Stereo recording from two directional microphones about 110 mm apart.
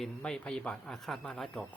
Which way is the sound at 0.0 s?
5° left (ahead or behind).